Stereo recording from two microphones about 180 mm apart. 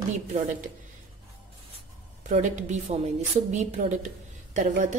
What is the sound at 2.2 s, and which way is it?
A woman's voice, 40° right (ahead or behind).